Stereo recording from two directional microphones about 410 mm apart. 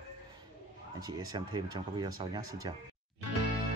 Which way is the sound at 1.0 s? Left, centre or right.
Centre.